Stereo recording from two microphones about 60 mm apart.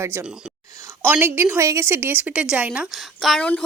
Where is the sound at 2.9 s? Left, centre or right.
Centre.